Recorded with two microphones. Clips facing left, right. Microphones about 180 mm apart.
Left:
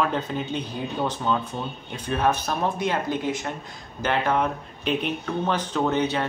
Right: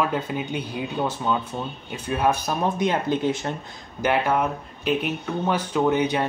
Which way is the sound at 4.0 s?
10° right (ahead or behind).